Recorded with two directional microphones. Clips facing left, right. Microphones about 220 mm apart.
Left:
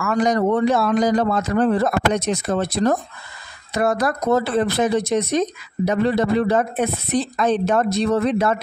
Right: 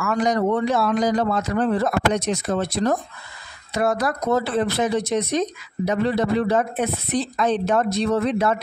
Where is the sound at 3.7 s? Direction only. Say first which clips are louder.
Left 2 dB; 50° left (ahead or behind).